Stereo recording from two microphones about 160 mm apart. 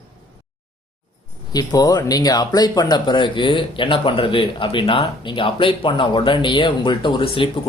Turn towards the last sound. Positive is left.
turn(degrees=30)  # may be behind; listen again after turning